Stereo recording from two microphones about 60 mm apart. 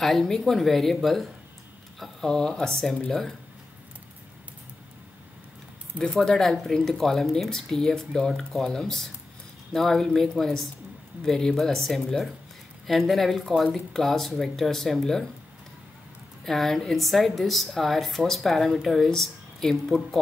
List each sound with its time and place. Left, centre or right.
0.0 s speech: centre
2.2 s speech: centre
6.1 s speech: centre
16.4 s speech: centre